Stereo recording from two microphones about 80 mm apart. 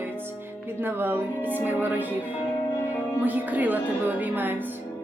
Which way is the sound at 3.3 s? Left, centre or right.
Right.